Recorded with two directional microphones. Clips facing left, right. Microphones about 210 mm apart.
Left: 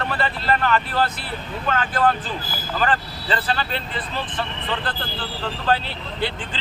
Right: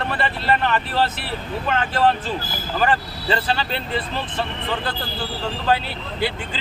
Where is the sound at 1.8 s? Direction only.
25° right (ahead or behind).